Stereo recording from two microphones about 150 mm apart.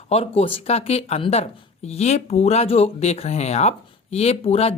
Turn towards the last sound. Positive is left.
turn(degrees=40)  # may be behind; listen again after turning